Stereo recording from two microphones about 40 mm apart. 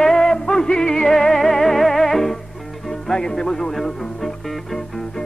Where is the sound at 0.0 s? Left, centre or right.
Centre.